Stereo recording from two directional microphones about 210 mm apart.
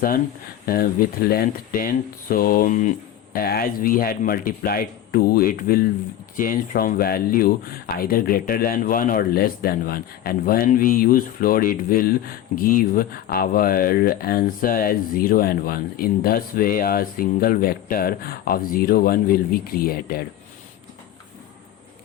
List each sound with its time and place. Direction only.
0.6 s speech: 45° left (ahead or behind)